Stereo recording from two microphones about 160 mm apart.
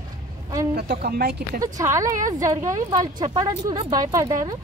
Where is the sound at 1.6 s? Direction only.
20° right (ahead or behind).